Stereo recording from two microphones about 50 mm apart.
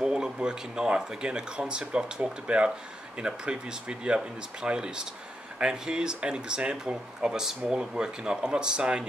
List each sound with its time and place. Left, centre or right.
0.0 s speech: centre